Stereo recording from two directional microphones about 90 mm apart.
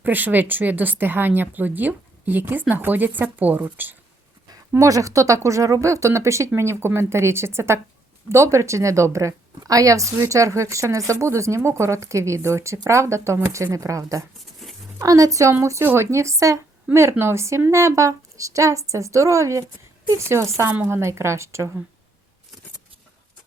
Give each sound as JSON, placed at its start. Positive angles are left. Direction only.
{"t": 0.0, "sound": "speech", "side_deg": -20}
{"t": 4.7, "sound": "a woman's voice", "side_deg": -40}
{"t": 14.6, "sound": "a sound", "side_deg": 0}
{"t": 14.9, "sound": "a woman's voice", "side_deg": -40}
{"t": 15.8, "sound": "a woman's voice", "side_deg": -25}